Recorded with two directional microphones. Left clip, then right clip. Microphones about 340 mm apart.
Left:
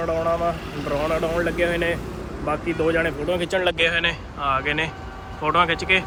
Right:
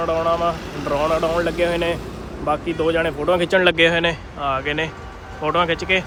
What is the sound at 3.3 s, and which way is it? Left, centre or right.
Speech, right.